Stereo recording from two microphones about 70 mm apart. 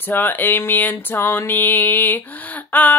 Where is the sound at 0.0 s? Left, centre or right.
Left.